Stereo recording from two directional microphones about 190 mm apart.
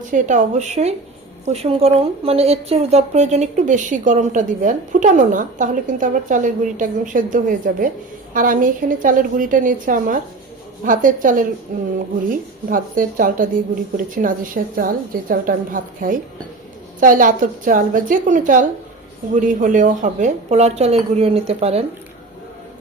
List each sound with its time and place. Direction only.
0.1 s a woman's voice: 40° right (ahead or behind)